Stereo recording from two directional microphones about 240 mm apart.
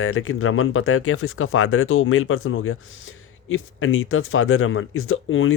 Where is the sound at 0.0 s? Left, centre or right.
Left.